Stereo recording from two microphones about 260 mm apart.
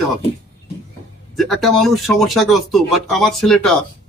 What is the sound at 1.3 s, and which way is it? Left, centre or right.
Speech, centre.